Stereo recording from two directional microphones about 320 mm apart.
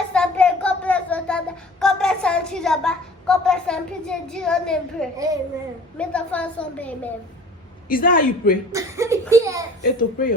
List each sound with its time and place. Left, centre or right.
0.1 s child singing: centre
5.1 s a child's voice: centre
6.0 s a woman's voice: centre
7.9 s a man's voice: left
8.7 s speech: centre
9.3 s a sound: centre
9.8 s a man's voice: left